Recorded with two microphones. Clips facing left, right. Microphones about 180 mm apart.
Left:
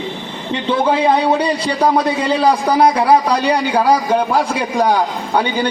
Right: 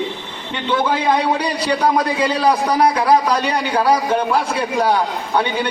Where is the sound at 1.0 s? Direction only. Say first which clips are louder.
Left 4 dB; 30° left (ahead or behind).